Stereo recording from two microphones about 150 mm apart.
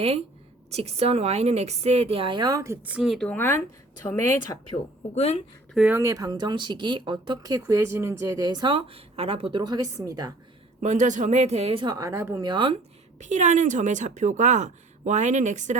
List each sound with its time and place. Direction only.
0.7 s speech: 45° right (ahead or behind); by 2.7 s 25° right (ahead or behind)
2.8 s speech: 5° right (ahead or behind)
3.3 s speech: 15° left (ahead or behind)
5.1 s a woman's voice: 45° left (ahead or behind)
5.9 s speech: 20° right (ahead or behind)
10.8 s speech: 55° right (ahead or behind); by 11.9 s 35° right (ahead or behind)
11.9 s speech: 20° right (ahead or behind)
12.5 s speech: 35° right (ahead or behind)
13.1 s speech: 55° right (ahead or behind)